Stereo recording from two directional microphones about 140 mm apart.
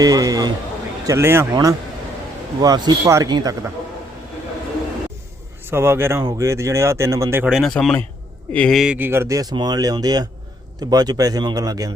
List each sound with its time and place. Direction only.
0.0 s speech: 25° right (ahead or behind)
5.6 s a man's voice: 15° right (ahead or behind)
7.4 s a man's voice: centre (ahead or behind)
8.8 s speech: 10° right (ahead or behind); by 11.9 s 25° right (ahead or behind)